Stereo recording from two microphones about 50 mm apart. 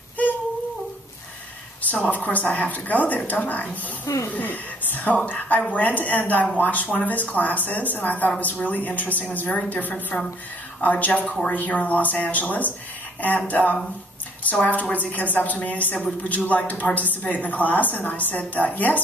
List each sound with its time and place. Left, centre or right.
1.8 s a woman's voice: left
11.2 s speech: centre
11.5 s a woman's voice: left